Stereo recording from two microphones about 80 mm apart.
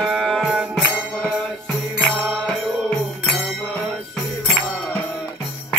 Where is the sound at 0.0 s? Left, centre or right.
Centre.